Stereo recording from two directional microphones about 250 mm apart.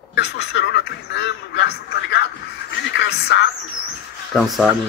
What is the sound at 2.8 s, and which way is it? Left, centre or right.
Music, left.